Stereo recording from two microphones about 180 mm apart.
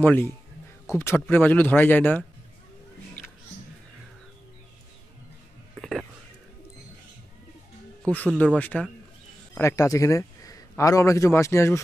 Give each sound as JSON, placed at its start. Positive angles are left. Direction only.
{"t": 0.0, "sound": "speech", "side_deg": 10}
{"t": 5.8, "sound": "music", "side_deg": 0}
{"t": 8.0, "sound": "a man's voice", "side_deg": 10}